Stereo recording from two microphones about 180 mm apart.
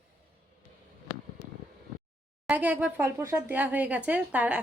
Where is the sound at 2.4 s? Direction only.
10° right (ahead or behind).